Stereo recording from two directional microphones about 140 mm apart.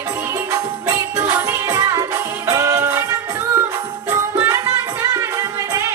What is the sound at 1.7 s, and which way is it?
Music, 30° right (ahead or behind).